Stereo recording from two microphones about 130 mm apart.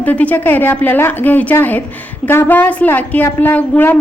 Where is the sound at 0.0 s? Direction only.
10° left (ahead or behind).